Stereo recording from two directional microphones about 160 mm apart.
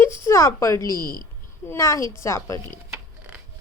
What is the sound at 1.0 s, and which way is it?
Speech, 60° left (ahead or behind).